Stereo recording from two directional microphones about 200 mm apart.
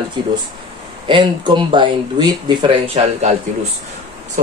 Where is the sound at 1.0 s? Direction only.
25° right (ahead or behind).